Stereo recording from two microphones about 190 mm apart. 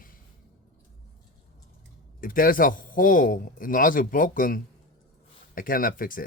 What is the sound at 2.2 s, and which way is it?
Speech, 45° left (ahead or behind).